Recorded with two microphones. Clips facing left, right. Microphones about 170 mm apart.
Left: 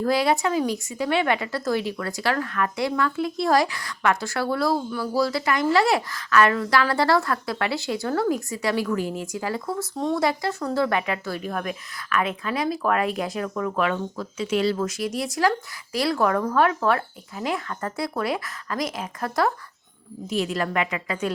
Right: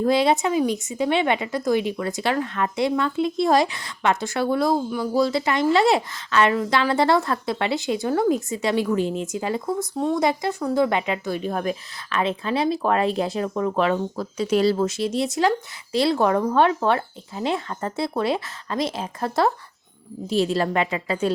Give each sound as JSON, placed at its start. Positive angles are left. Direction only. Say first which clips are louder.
{"t": 0.0, "sound": "speech", "louder": "right 2 dB", "side_deg": -20}
{"t": 10.0, "sound": "speech", "louder": "right 1 dB", "side_deg": -10}
{"t": 10.2, "sound": "speech", "louder": "right 2 dB", "side_deg": -20}